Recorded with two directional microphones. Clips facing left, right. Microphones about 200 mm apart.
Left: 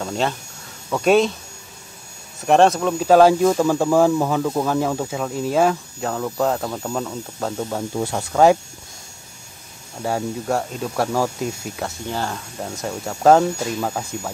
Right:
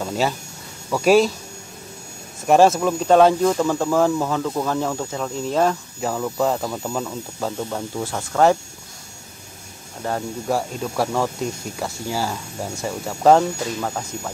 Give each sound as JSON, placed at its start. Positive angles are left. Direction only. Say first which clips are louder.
{"t": 0.0, "sound": "speech", "louder": "right 1 dB", "side_deg": -5}
{"t": 2.4, "sound": "speech", "louder": "even", "side_deg": 0}
{"t": 8.0, "sound": "speech", "louder": "left 2 dB", "side_deg": 20}
{"t": 10.0, "sound": "speech", "louder": "left 1 dB", "side_deg": 5}